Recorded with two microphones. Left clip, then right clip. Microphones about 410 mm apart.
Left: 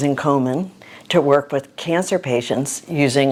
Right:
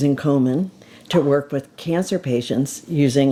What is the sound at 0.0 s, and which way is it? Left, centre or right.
Speech, left.